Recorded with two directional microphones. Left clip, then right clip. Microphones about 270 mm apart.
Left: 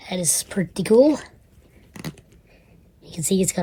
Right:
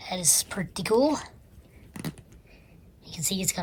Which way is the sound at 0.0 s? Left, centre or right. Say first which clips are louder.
Left 1 dB; right.